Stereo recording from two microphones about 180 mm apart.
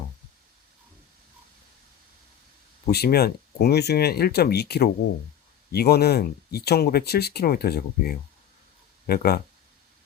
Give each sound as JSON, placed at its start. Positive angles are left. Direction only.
{"t": 2.9, "sound": "speech", "side_deg": 60}